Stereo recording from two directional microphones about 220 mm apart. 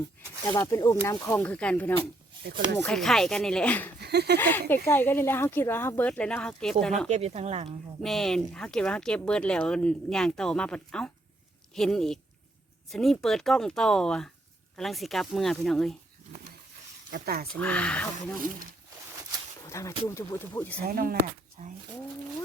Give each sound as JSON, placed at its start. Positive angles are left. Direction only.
{"t": 0.4, "sound": "speech", "side_deg": 15}
{"t": 4.0, "sound": "speech", "side_deg": -50}
{"t": 4.4, "sound": "speech", "side_deg": 10}
{"t": 7.1, "sound": "speech", "side_deg": -30}
{"t": 8.0, "sound": "speech", "side_deg": 0}
{"t": 17.1, "sound": "speech", "side_deg": -45}
{"t": 17.5, "sound": "speech", "side_deg": 5}
{"t": 19.6, "sound": "a sound", "side_deg": 15}
{"t": 20.1, "sound": "speech", "side_deg": 10}
{"t": 20.8, "sound": "speech", "side_deg": -45}